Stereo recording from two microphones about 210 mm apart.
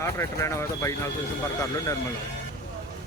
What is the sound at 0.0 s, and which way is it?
Speech, 15° left (ahead or behind).